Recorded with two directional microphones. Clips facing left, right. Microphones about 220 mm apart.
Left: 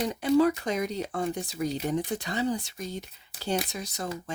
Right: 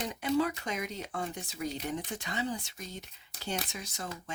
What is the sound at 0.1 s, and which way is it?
Speech, 40° left (ahead or behind).